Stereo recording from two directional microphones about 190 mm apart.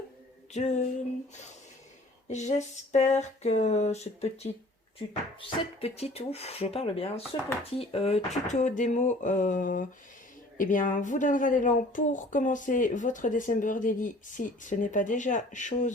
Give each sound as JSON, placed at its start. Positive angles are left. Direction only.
{"t": 0.5, "sound": "speech", "side_deg": 40}
{"t": 2.2, "sound": "speech", "side_deg": 40}
{"t": 5.4, "sound": "speech", "side_deg": 30}